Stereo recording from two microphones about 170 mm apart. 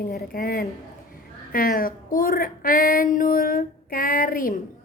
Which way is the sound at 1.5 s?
60° left (ahead or behind).